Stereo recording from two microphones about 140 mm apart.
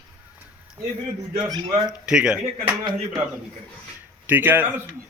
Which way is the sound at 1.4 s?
30° right (ahead or behind).